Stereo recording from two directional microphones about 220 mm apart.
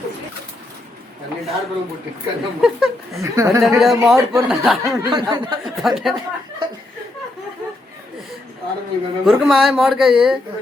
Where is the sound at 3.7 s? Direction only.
Centre (ahead or behind).